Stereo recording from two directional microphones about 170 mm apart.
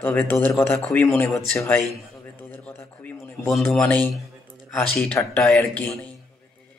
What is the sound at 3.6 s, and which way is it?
Speech, 10° left (ahead or behind).